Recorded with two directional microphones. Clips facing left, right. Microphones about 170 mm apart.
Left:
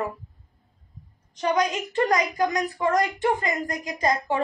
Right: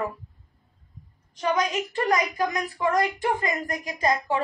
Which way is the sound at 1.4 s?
20° left (ahead or behind).